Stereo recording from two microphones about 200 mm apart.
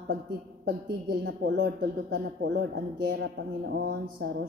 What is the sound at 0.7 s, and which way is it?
Speech, 55° right (ahead or behind).